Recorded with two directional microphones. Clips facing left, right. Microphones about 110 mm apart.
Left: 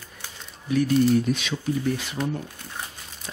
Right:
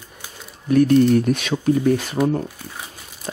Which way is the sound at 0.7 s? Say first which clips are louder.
Right 6 dB; 55° right (ahead or behind).